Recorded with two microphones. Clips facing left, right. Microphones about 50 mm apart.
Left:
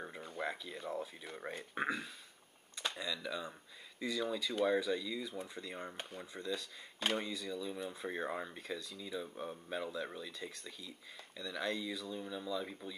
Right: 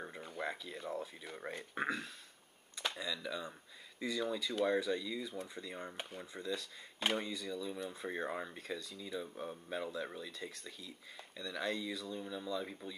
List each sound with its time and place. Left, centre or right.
0.0 s speech: centre